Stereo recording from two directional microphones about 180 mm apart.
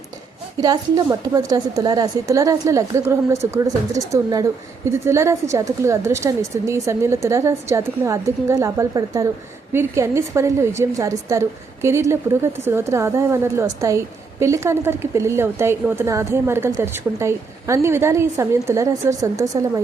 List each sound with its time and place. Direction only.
0.6 s a woman's voice: 20° right (ahead or behind)